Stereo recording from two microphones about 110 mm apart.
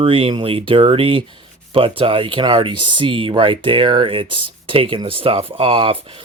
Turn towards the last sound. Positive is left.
turn(degrees=-60)  # may be behind; listen again after turning